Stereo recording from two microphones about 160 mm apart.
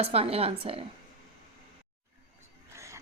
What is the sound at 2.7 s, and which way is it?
Music, 20° right (ahead or behind).